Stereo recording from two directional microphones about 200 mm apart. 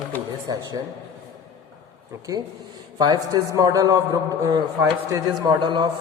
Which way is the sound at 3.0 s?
20° right (ahead or behind).